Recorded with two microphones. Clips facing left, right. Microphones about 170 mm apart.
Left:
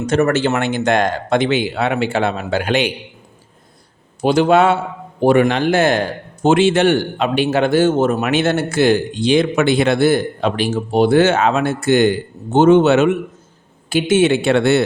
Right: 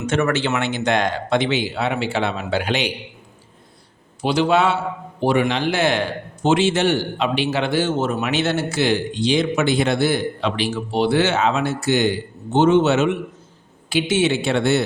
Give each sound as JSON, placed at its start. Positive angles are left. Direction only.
{"t": 0.0, "sound": "a man's voice", "side_deg": 40}
{"t": 4.2, "sound": "a man's voice", "side_deg": 50}